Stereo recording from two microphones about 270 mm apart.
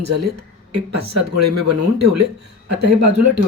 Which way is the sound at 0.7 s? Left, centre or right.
Right.